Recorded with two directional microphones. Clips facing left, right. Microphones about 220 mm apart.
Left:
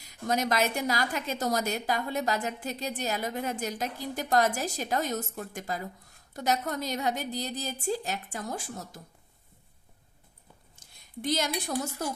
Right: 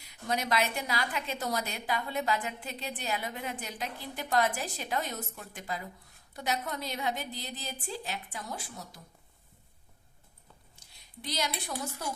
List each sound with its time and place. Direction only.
0.1 s a woman's voice: 45° left (ahead or behind)
10.8 s a sound: 50° left (ahead or behind)
11.1 s a woman's voice: 50° left (ahead or behind)